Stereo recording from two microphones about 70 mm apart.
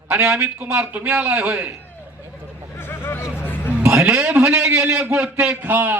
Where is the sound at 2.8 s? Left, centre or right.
Left.